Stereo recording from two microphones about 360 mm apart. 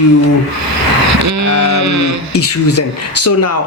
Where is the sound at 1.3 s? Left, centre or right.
Right.